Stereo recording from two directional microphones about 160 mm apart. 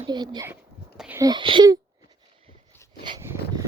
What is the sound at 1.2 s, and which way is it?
Speech, 25° right (ahead or behind).